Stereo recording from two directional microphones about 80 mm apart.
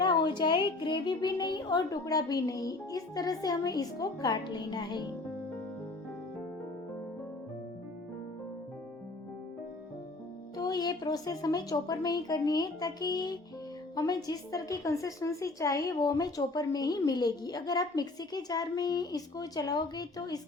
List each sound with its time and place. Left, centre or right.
0.0 s a woman's voice: left
10.6 s a woman's voice: left